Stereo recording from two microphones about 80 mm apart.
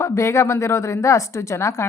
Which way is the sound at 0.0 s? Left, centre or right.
Left.